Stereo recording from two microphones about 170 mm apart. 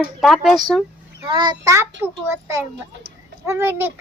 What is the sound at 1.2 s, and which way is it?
Speech, 25° right (ahead or behind).